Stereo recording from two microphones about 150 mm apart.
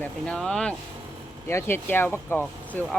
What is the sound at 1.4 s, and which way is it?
Speech, 15° left (ahead or behind).